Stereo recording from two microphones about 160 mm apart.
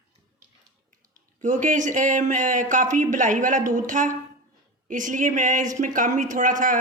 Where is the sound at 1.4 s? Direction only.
50° right (ahead or behind).